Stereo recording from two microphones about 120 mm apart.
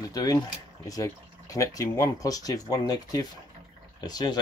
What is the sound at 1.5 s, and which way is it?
Speech, 30° left (ahead or behind).